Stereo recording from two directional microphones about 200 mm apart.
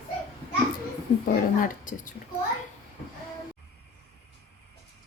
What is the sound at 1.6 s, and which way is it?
Speech, 40° left (ahead or behind).